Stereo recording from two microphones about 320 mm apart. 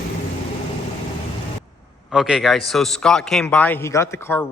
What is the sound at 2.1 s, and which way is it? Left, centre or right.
A man's voice, centre.